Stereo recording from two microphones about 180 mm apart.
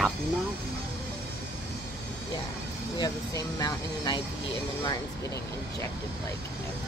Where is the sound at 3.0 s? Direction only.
20° left (ahead or behind).